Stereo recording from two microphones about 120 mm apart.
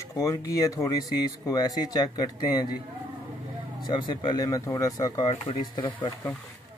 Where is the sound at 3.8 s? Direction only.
40° left (ahead or behind).